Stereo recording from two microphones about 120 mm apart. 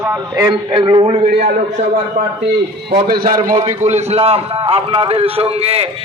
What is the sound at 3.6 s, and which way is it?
A man's voice, 70° right (ahead or behind).